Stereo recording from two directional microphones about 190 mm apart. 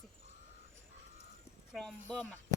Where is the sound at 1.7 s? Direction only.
Centre (ahead or behind).